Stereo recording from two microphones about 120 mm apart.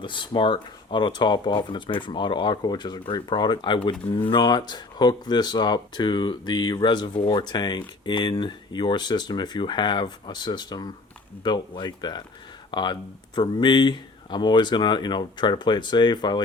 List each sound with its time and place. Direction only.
0.0 s speech: 40° left (ahead or behind)